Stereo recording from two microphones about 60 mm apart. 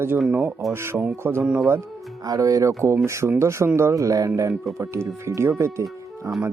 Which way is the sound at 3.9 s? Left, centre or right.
Right.